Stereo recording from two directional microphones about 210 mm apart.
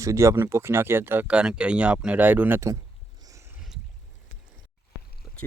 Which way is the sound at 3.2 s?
15° right (ahead or behind).